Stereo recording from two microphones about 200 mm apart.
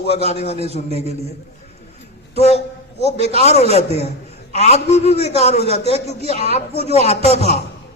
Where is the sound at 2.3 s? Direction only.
30° left (ahead or behind).